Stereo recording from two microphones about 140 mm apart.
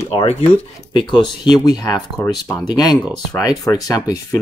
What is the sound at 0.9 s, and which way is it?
Speech, 35° left (ahead or behind).